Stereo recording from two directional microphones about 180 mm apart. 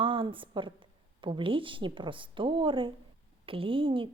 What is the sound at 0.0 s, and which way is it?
A woman's voice, 30° right (ahead or behind).